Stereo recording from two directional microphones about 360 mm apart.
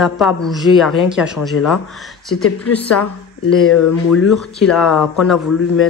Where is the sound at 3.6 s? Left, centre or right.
Left.